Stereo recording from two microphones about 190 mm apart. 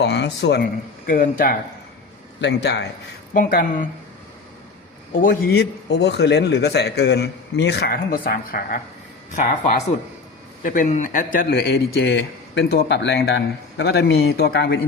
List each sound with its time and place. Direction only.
0.0 s speech: 65° left (ahead or behind); by 1.5 s 45° left (ahead or behind)
2.4 s a man's voice: 65° left (ahead or behind)
3.3 s speech: 45° left (ahead or behind)
5.2 s a man's voice: 50° left (ahead or behind)